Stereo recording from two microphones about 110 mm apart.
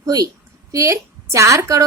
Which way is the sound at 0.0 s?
35° right (ahead or behind).